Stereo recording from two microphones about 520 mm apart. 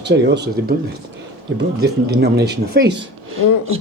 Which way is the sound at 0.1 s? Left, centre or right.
Centre.